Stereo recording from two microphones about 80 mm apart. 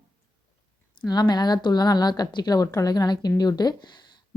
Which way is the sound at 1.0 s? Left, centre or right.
Left.